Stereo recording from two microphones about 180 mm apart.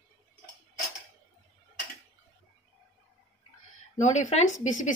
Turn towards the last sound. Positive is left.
turn(degrees=45)  # may be behind; listen again after turning